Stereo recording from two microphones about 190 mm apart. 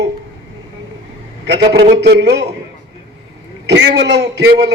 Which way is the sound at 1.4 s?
60° right (ahead or behind).